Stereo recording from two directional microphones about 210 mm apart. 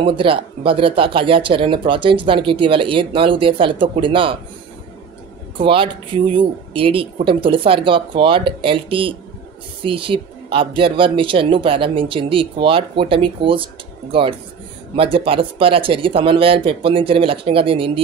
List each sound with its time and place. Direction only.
0.0 s speech: 25° right (ahead or behind)
5.6 s speech: 25° right (ahead or behind)
9.8 s speech: 25° right (ahead or behind)
15.0 s speech: 25° right (ahead or behind)